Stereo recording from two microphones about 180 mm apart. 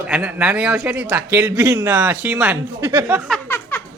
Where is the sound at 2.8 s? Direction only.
20° right (ahead or behind).